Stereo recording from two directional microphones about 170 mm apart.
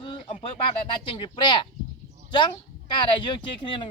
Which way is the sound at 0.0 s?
30° left (ahead or behind).